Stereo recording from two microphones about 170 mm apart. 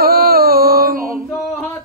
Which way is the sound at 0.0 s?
60° right (ahead or behind).